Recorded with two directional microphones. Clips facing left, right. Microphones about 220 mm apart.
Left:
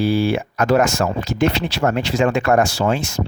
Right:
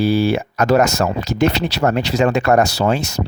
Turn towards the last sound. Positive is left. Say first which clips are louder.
# right 2 dB
turn(degrees=-40)  # may be behind; listen again after turning